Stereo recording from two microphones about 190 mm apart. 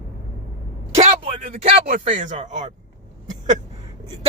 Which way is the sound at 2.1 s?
40° right (ahead or behind).